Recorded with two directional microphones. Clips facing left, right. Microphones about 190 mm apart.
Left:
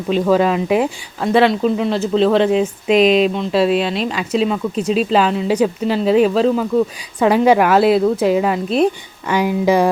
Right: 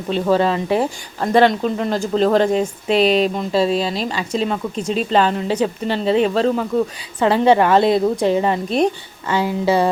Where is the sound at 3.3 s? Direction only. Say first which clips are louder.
Left 2 dB; centre (ahead or behind).